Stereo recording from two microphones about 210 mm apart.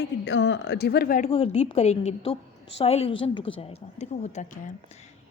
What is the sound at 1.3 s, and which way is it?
A woman's voice, 30° left (ahead or behind).